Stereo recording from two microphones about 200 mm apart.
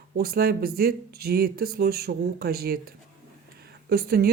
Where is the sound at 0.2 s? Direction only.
50° right (ahead or behind).